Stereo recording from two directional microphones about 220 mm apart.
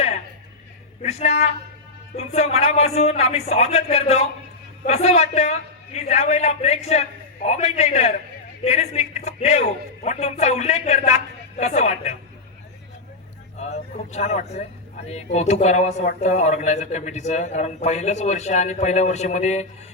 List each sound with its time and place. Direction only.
1.0 s speech: 30° left (ahead or behind)
13.6 s speech: 30° left (ahead or behind)